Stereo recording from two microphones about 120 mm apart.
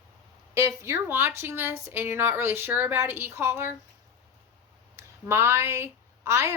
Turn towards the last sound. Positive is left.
turn(degrees=-20)  # may be behind; listen again after turning